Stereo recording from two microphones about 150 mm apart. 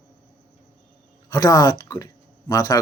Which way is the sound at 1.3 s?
25° left (ahead or behind).